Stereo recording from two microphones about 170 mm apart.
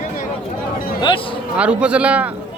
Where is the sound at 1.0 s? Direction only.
30° left (ahead or behind).